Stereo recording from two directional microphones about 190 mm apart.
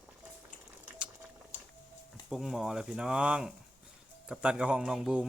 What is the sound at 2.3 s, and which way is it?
A man's voice, centre (ahead or behind).